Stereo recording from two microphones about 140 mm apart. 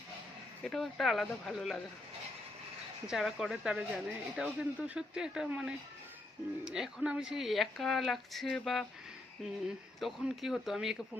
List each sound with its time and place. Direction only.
0.6 s speech: 5° left (ahead or behind)
3.1 s speech: 5° right (ahead or behind)